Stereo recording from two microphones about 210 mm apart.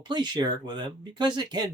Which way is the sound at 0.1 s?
20° right (ahead or behind).